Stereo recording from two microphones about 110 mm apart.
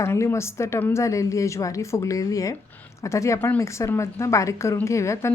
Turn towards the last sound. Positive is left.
turn(degrees=25)  # may be behind; listen again after turning